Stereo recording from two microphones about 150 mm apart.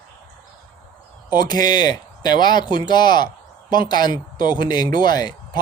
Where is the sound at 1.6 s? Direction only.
30° left (ahead or behind).